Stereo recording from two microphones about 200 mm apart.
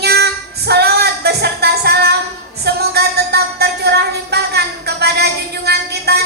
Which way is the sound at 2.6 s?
55° right (ahead or behind).